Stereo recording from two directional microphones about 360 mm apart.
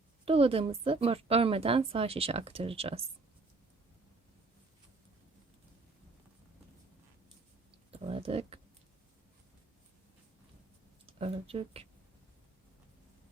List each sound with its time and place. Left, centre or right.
0.3 s a woman's voice: centre
7.9 s a sound: centre
11.0 s speech: centre